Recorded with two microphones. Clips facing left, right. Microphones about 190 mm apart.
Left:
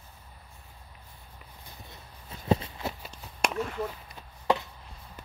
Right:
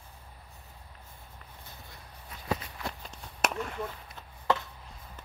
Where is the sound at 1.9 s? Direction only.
25° left (ahead or behind).